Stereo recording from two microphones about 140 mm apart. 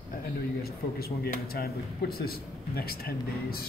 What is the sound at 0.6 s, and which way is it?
Speech, 90° left.